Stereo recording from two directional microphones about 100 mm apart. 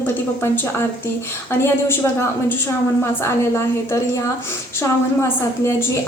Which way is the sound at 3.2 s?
25° left (ahead or behind).